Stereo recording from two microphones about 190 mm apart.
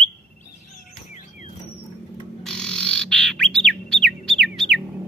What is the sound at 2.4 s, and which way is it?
Bird, 5° left (ahead or behind).